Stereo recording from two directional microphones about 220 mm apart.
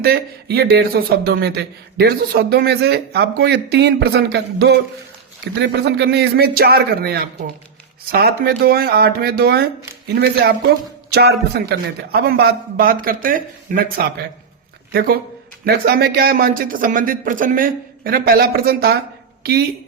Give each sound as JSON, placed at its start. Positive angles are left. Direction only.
{"t": 0.0, "sound": "speech", "side_deg": -45}
{"t": 11.1, "sound": "a man's voice", "side_deg": -45}